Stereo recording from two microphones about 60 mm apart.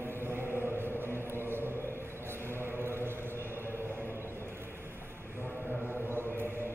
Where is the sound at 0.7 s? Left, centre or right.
Right.